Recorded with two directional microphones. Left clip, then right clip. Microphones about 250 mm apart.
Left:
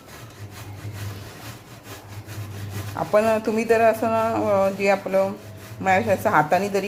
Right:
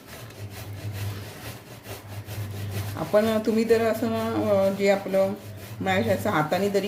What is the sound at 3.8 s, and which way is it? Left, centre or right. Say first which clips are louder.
A woman's voice: left 7 dB; centre.